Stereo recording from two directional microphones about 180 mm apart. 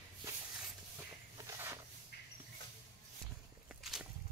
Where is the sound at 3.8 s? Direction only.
Centre (ahead or behind).